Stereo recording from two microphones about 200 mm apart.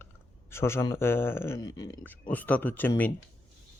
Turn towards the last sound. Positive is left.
turn(degrees=10)  # may be behind; listen again after turning